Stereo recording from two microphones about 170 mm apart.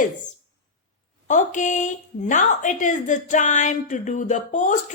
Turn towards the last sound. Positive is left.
turn(degrees=45)  # may be behind; listen again after turning